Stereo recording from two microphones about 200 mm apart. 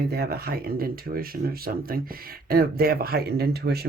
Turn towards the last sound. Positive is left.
turn(degrees=-55)  # may be behind; listen again after turning